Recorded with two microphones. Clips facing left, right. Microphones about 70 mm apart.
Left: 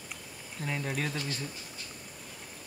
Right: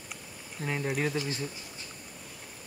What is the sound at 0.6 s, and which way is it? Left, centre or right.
Speech, right.